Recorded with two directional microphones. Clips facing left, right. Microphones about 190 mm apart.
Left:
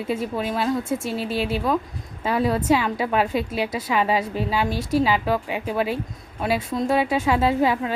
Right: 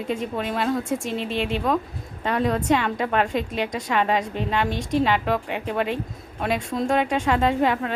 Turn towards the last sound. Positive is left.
turn(degrees=5)  # may be behind; listen again after turning